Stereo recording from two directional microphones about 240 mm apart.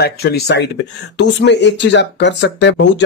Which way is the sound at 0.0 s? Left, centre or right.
Left.